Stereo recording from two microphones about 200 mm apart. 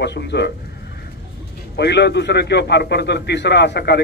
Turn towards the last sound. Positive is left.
turn(degrees=55)  # may be behind; listen again after turning